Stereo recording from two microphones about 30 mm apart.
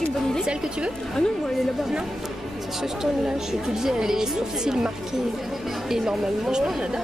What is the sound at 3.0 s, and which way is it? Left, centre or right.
A woman's voice, centre.